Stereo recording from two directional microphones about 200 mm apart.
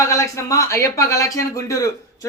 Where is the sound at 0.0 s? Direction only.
15° left (ahead or behind).